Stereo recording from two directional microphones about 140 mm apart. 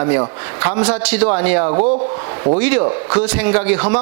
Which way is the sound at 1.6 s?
30° right (ahead or behind).